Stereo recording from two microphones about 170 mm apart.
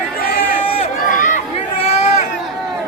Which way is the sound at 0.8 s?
50° left (ahead or behind).